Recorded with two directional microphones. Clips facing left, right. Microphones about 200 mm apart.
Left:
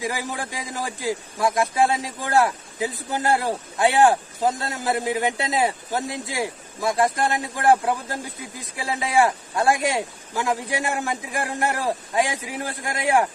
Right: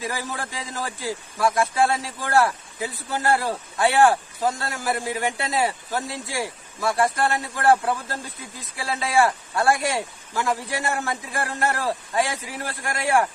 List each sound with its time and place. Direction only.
0.0 s a man's voice: 15° left (ahead or behind)